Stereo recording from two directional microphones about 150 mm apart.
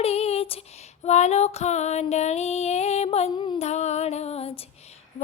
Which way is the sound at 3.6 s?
50° left (ahead or behind).